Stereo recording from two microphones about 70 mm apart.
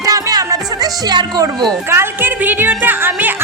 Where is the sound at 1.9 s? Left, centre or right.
Right.